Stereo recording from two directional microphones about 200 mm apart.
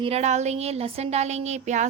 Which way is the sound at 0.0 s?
35° right (ahead or behind).